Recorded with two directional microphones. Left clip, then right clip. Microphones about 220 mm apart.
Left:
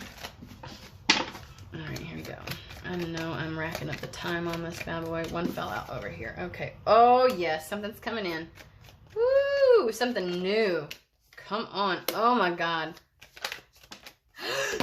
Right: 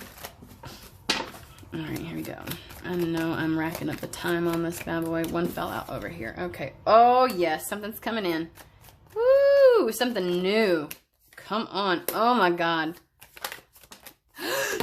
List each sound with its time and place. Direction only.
1.7 s speech: 35° right (ahead or behind)
14.3 s gasp: 35° right (ahead or behind)